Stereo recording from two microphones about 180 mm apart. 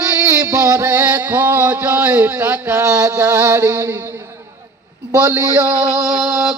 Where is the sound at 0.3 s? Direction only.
15° right (ahead or behind).